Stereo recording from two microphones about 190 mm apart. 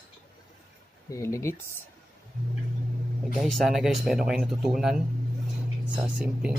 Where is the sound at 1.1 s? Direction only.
15° left (ahead or behind).